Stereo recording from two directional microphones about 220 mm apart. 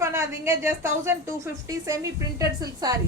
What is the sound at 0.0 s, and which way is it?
A woman's voice, 15° right (ahead or behind).